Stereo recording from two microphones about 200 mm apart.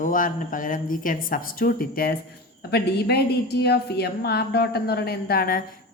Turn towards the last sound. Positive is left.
turn(degrees=45)  # may be behind; listen again after turning